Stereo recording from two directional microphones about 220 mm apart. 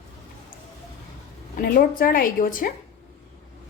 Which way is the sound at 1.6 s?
40° left (ahead or behind).